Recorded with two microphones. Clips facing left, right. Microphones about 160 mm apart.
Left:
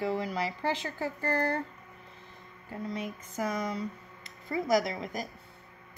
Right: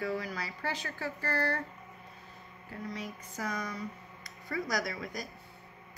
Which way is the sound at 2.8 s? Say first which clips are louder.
Left 4 dB; 25° left (ahead or behind).